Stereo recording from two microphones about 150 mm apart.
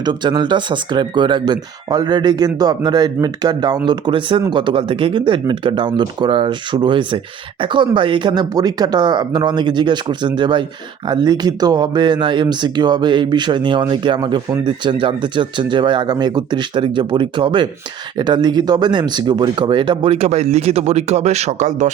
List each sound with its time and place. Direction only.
0.0 s speech: 30° right (ahead or behind); by 21.8 s 50° right (ahead or behind)